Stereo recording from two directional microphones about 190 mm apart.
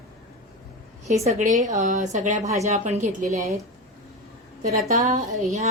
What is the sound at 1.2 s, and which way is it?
A woman's voice, 40° right (ahead or behind).